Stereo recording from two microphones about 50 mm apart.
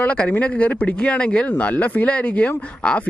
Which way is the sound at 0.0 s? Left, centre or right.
Left.